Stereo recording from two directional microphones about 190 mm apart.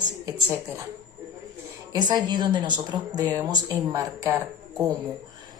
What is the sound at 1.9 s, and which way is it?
A woman's voice, 25° right (ahead or behind).